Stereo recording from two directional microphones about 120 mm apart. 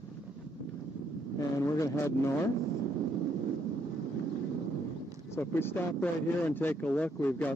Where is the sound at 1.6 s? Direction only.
25° left (ahead or behind).